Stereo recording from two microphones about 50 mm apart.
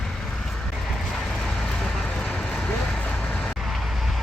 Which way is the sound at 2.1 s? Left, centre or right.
Centre.